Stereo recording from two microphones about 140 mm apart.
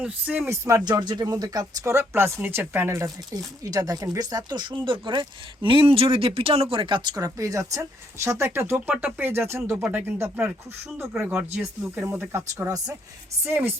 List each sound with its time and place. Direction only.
0.0 s speech: 10° right (ahead or behind)